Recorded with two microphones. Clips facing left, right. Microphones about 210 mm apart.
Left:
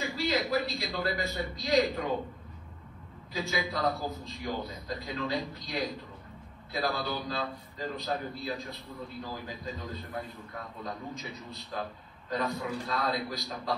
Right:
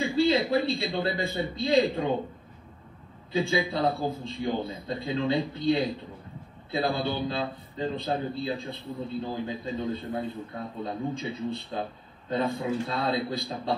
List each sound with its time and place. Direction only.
0.0 s a man's voice: 30° right (ahead or behind)
3.3 s a man's voice: 30° right (ahead or behind)